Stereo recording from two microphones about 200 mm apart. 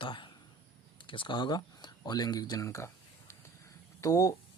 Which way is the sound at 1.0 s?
25° left (ahead or behind).